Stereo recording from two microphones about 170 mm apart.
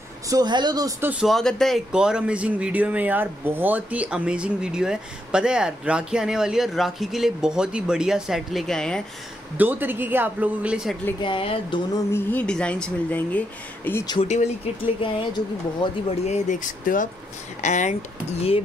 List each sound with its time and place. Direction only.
0.3 s speech: 25° right (ahead or behind)
1.2 s speech: centre (ahead or behind)
9.6 s speech: 10° right (ahead or behind)
11.2 s speech: 30° left (ahead or behind)
12.1 s speech: 10° left (ahead or behind)
14.2 s speech: 40° left (ahead or behind)
15.0 s speech: 30° left (ahead or behind)
16.3 s speech: 45° left (ahead or behind)